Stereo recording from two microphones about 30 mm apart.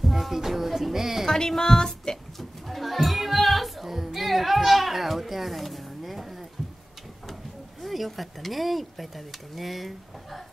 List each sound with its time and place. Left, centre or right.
0.0 s speech: centre
1.2 s a sound: centre
1.8 s speech: left
2.7 s music: centre
7.8 s speech: centre